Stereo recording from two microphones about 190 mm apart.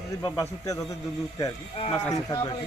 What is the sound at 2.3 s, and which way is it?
Speech, 20° left (ahead or behind).